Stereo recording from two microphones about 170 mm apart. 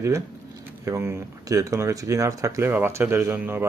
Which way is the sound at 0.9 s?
15° right (ahead or behind).